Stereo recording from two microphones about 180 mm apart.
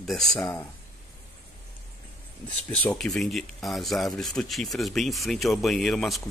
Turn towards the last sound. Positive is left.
turn(degrees=0)  # may be behind; listen again after turning